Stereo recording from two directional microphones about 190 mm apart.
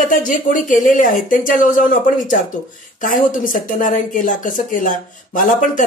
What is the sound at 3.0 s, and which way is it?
Speech, 45° left (ahead or behind).